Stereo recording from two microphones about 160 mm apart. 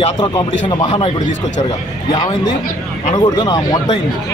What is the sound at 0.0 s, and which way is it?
Speech, 30° left (ahead or behind).